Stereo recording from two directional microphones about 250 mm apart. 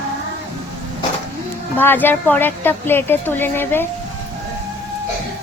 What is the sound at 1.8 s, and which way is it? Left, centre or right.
Speech, centre.